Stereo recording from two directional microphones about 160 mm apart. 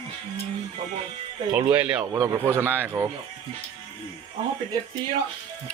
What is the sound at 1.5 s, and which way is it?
Speech, 10° right (ahead or behind).